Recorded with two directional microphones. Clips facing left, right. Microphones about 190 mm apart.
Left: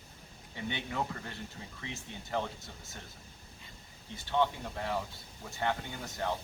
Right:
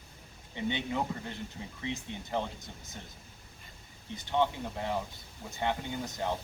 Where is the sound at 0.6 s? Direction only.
20° right (ahead or behind).